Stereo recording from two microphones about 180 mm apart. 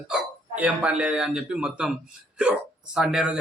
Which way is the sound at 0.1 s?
5° right (ahead or behind).